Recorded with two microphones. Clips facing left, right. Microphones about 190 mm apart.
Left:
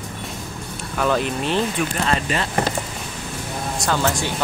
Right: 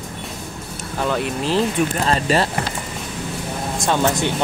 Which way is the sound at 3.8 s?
20° right (ahead or behind).